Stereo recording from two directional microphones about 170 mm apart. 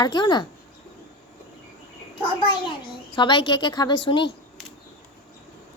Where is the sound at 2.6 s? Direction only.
25° left (ahead or behind).